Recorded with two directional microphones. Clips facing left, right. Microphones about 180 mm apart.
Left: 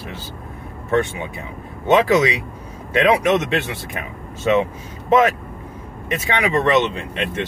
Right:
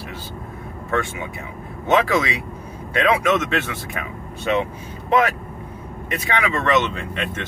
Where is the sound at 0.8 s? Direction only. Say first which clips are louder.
Left 5 dB; 20° left (ahead or behind).